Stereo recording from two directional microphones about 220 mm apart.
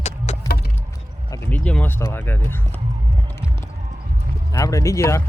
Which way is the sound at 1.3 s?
10° left (ahead or behind).